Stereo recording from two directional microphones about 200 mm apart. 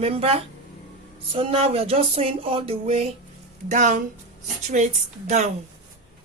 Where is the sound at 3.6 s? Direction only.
40° right (ahead or behind).